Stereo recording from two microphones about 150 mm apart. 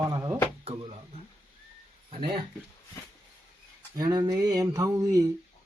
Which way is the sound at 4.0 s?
25° right (ahead or behind).